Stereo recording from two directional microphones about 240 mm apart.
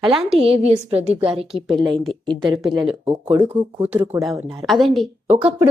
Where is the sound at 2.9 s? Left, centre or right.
Centre.